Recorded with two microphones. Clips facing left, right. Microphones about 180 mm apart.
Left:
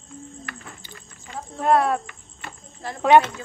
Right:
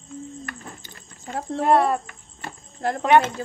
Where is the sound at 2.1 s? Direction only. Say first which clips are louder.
Right 2 dB; 45° right (ahead or behind).